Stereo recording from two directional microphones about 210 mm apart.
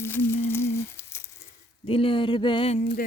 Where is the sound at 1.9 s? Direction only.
25° left (ahead or behind).